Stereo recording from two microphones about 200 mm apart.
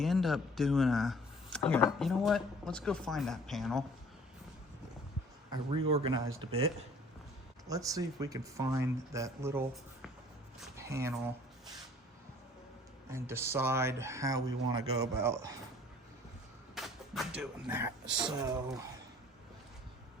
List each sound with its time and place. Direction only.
0.0 s speech: centre (ahead or behind)
5.5 s speech: 25° right (ahead or behind)
7.7 s speech: 15° right (ahead or behind)
10.8 s a sound: 15° right (ahead or behind)
13.1 s speech: 15° right (ahead or behind)
16.7 s speech: centre (ahead or behind)
18.3 s speech: 20° right (ahead or behind)